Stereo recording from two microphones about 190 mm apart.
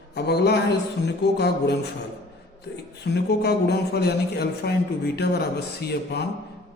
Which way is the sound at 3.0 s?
60° left (ahead or behind).